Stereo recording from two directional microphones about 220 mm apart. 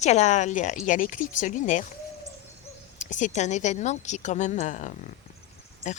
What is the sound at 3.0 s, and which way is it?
Speech, 35° left (ahead or behind).